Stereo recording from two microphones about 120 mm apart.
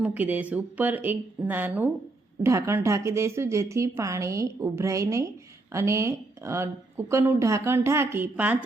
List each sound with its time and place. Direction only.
0.0 s a woman's voice: 15° right (ahead or behind)